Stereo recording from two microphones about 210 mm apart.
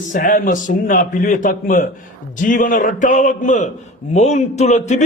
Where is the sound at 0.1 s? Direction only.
40° left (ahead or behind).